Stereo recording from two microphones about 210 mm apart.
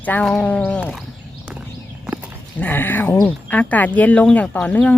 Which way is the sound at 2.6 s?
10° left (ahead or behind).